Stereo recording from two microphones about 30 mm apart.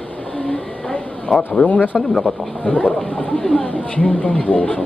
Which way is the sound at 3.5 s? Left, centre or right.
Left.